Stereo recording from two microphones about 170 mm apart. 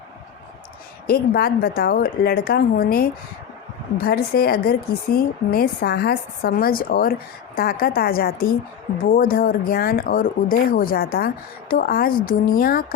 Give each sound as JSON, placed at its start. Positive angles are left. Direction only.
{"t": 1.0, "sound": "a woman's voice", "side_deg": 60}